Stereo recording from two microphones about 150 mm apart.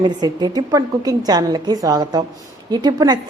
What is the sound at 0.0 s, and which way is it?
A woman's voice, 30° right (ahead or behind).